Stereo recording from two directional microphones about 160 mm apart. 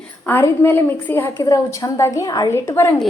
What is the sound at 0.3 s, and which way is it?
A woman's voice, 15° left (ahead or behind).